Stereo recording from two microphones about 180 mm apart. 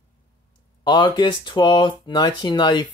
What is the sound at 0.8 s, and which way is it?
Speech, 25° left (ahead or behind).